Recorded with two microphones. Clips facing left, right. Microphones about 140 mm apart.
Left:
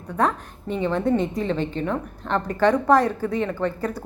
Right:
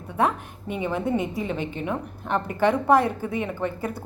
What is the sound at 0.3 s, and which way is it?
A woman's voice, 10° right (ahead or behind).